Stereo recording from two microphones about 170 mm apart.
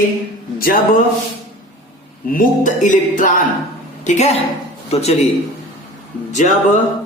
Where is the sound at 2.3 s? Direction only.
50° left (ahead or behind).